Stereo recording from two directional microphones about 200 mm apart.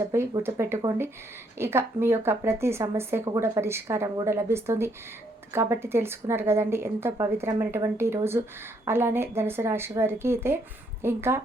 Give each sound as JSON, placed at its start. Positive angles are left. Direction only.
{"t": 0.1, "sound": "a woman's voice", "side_deg": -10}